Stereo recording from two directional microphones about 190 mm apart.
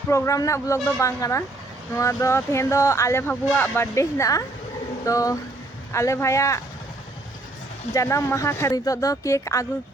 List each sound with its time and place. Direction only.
0.1 s speech: 15° left (ahead or behind)
7.9 s speech: 15° left (ahead or behind)